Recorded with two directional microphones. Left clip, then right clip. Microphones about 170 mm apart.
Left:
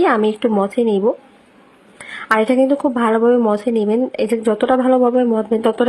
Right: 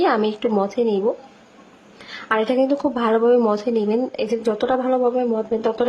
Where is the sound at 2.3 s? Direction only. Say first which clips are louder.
Left 4 dB; 20° left (ahead or behind).